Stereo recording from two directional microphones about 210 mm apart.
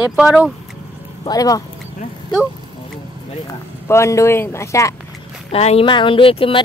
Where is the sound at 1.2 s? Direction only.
15° left (ahead or behind).